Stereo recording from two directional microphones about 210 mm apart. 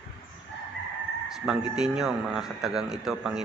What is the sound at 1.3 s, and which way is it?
A man's voice, centre (ahead or behind).